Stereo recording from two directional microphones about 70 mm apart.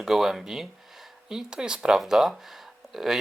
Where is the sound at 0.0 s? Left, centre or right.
Centre.